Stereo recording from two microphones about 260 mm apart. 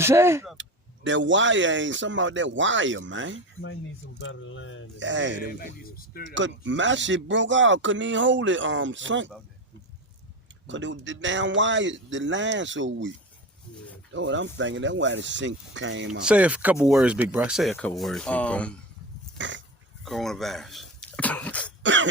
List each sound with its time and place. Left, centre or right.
0.0 s speech: centre
0.5 s speech: right
4.2 s speech: left
4.9 s speech: right
5.4 s speech: left
6.3 s speech: right
10.7 s speech: right
14.1 s speech: right
16.2 s speech: centre
19.4 s dog: right
20.1 s speech: centre
21.8 s speech: right